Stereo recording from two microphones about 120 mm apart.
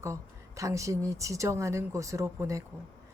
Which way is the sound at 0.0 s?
25° right (ahead or behind).